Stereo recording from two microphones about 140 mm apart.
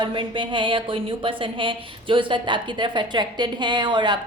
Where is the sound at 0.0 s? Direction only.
35° right (ahead or behind).